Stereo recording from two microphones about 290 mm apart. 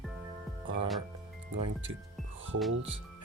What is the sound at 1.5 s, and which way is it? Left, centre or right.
Speech, right.